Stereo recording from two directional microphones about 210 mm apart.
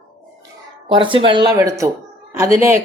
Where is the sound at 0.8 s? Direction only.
25° right (ahead or behind).